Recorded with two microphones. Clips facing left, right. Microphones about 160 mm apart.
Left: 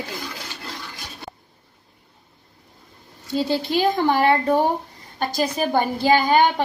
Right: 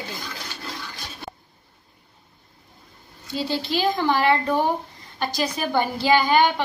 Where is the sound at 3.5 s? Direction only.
55° left (ahead or behind).